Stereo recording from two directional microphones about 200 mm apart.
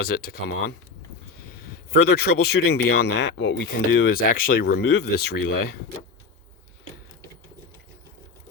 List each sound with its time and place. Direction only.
0.0 s speech: 50° left (ahead or behind)
1.9 s speech: 55° left (ahead or behind)